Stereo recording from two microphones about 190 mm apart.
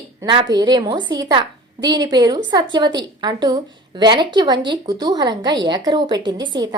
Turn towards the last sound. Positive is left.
turn(degrees=-20)  # may be behind; listen again after turning